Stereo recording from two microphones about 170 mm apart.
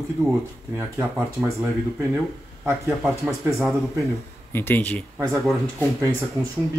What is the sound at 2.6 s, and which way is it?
Speech, 15° right (ahead or behind).